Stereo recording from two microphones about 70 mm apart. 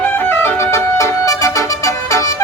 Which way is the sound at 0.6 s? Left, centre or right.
Left.